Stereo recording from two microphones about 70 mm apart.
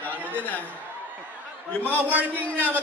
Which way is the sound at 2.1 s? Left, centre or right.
Right.